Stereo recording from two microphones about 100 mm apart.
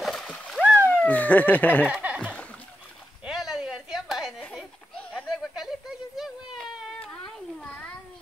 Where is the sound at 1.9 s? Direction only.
10° right (ahead or behind).